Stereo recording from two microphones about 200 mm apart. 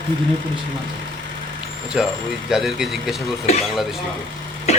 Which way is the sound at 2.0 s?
5° right (ahead or behind).